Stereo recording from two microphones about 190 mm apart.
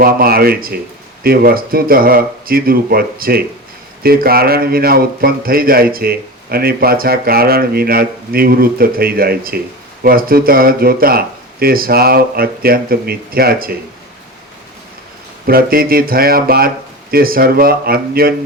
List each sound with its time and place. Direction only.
0.0 s speech: 50° right (ahead or behind)
15.4 s speech: 50° right (ahead or behind)